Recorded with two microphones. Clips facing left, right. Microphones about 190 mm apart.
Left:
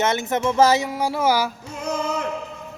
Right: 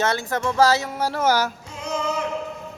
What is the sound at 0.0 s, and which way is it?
Speech, 20° left (ahead or behind).